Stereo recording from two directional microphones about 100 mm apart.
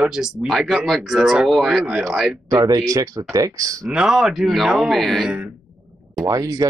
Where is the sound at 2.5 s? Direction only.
40° right (ahead or behind).